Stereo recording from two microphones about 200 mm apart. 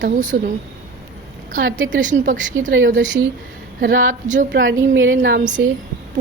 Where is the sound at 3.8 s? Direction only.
45° right (ahead or behind).